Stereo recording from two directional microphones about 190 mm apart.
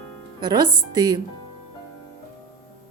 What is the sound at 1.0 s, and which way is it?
Speech, 20° right (ahead or behind).